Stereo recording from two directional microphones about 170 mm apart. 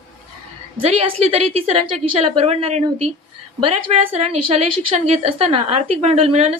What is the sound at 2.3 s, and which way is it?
Speech, 40° right (ahead or behind).